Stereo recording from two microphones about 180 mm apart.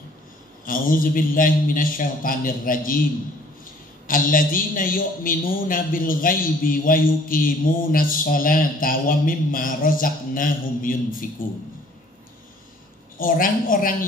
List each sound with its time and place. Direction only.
0.7 s speech: 50° left (ahead or behind)
4.1 s speech: 50° left (ahead or behind)
13.2 s speech: 50° left (ahead or behind)